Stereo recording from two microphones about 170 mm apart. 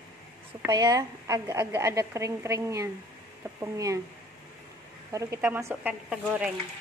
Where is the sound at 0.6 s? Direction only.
20° right (ahead or behind).